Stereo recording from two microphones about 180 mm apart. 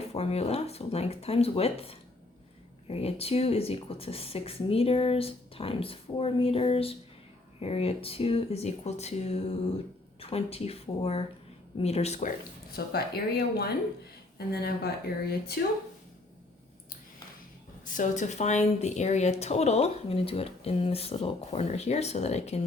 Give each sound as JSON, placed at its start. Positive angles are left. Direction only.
{"t": 0.1, "sound": "speech", "side_deg": 35}
{"t": 12.7, "sound": "speech", "side_deg": 60}
{"t": 17.8, "sound": "speech", "side_deg": 45}